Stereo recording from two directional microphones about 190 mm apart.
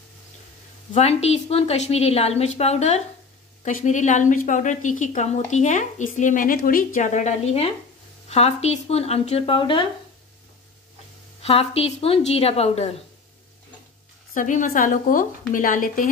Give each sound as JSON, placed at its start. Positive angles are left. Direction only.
{"t": 0.9, "sound": "a woman's voice", "side_deg": 35}
{"t": 11.4, "sound": "a woman's voice", "side_deg": 30}
{"t": 14.3, "sound": "a woman's voice", "side_deg": 40}